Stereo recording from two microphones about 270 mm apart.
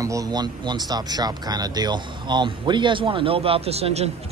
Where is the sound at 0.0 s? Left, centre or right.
Centre.